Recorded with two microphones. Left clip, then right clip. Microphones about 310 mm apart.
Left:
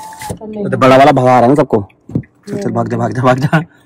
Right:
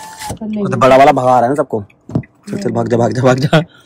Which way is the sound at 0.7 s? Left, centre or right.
Left.